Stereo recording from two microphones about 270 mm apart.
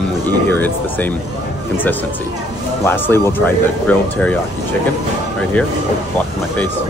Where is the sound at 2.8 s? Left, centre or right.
Centre.